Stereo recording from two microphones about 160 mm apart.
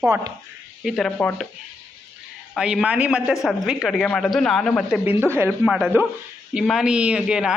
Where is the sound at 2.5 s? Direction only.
5° right (ahead or behind).